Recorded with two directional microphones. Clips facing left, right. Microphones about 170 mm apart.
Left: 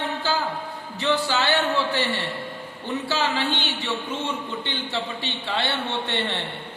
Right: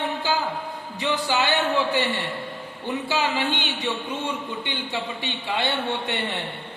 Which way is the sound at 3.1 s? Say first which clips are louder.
Even; 15° right (ahead or behind).